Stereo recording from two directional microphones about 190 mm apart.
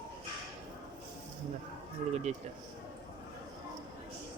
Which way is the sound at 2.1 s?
35° right (ahead or behind).